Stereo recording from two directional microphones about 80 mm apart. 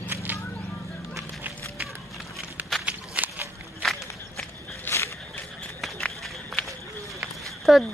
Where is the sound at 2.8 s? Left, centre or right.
Centre.